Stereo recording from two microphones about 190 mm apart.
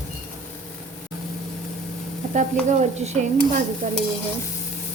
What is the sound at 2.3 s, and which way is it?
Stir, 40° right (ahead or behind).